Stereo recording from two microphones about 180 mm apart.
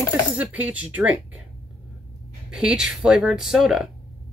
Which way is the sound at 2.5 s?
5° right (ahead or behind).